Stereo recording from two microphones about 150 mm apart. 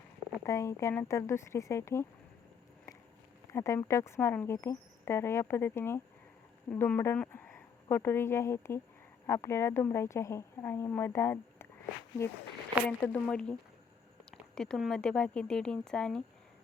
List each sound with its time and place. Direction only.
0.4 s speech: 20° left (ahead or behind)
3.5 s speech: 20° left (ahead or behind)
12.8 s speech: 10° left (ahead or behind)